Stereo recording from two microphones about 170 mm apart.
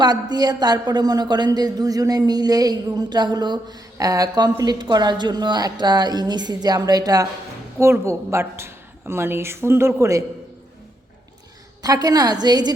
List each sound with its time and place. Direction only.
0.0 s a woman's voice: 25° right (ahead or behind)
11.8 s a woman's voice: 20° right (ahead or behind)